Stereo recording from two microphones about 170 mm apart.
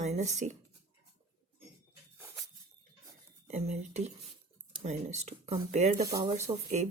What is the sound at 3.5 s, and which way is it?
Speech, 40° right (ahead or behind).